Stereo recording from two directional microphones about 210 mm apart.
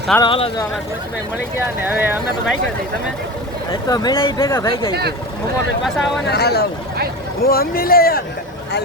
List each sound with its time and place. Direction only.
0.2 s speech: 25° left (ahead or behind)
1.8 s speech: 10° right (ahead or behind)
3.7 s speech: 20° left (ahead or behind)
5.8 s speech: centre (ahead or behind)
6.2 s speech: 50° left (ahead or behind)